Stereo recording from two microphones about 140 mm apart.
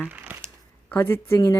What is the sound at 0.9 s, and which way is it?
Speech, 15° left (ahead or behind).